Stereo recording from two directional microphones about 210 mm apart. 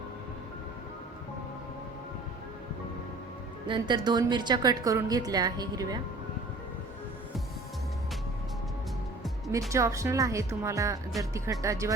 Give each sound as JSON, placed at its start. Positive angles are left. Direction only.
{"t": 3.7, "sound": "a woman's voice", "side_deg": -20}
{"t": 9.5, "sound": "speech", "side_deg": -15}